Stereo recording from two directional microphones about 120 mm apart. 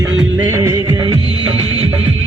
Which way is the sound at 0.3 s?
20° right (ahead or behind).